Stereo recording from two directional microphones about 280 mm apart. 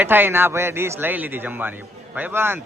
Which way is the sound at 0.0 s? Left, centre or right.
Centre.